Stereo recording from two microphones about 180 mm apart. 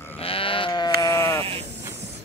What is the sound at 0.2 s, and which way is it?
Sheep, 30° left (ahead or behind).